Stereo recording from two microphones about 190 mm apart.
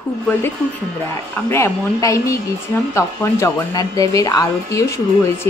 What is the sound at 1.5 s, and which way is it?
Speech, 15° left (ahead or behind).